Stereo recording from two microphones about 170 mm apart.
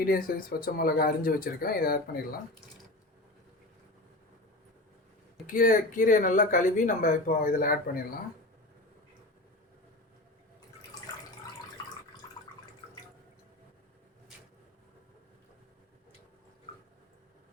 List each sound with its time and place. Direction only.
0.0 s speech: 55° left (ahead or behind)
5.5 s speech: 50° left (ahead or behind)